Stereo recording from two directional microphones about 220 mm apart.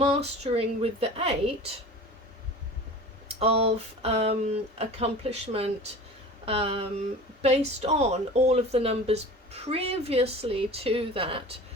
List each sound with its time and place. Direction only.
0.0 s speech: 30° right (ahead or behind)
3.2 s speech: 25° right (ahead or behind)